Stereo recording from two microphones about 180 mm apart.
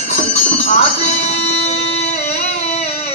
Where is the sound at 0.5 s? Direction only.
40° left (ahead or behind).